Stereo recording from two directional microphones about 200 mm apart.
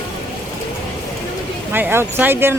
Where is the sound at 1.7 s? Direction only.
10° right (ahead or behind).